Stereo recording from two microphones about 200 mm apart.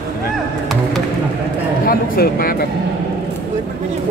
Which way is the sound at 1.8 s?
50° left (ahead or behind).